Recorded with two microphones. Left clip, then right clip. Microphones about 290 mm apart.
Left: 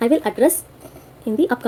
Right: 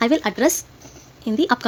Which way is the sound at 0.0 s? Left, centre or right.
Centre.